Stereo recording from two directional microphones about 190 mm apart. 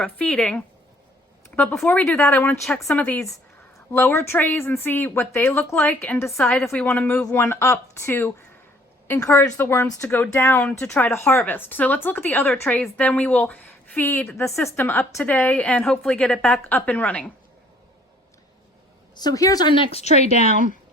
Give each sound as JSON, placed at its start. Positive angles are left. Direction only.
{"t": 0.0, "sound": "speech", "side_deg": 5}
{"t": 19.1, "sound": "a woman's voice", "side_deg": 20}